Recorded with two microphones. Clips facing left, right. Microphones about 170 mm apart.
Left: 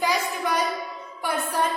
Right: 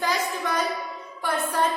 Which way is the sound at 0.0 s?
10° left (ahead or behind).